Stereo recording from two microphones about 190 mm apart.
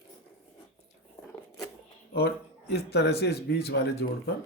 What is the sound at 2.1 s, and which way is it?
Speech, 55° left (ahead or behind).